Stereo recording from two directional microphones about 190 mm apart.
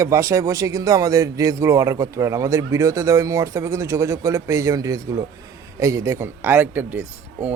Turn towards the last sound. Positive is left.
turn(degrees=-10)  # may be behind; listen again after turning